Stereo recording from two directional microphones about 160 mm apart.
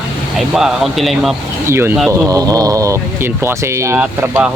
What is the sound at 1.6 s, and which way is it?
Speech, 15° right (ahead or behind).